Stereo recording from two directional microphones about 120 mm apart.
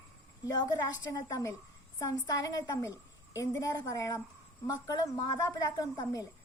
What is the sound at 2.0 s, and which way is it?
A woman's voice, 30° left (ahead or behind).